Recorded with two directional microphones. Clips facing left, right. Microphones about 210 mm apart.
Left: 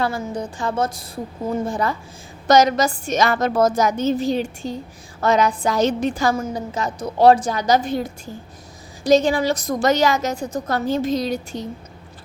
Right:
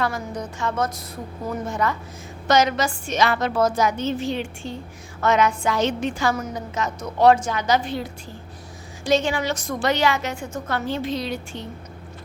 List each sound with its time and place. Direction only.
0.0 s a woman's voice: 30° left (ahead or behind)